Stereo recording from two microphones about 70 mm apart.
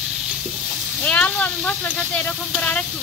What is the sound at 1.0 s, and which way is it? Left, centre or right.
Speech, centre.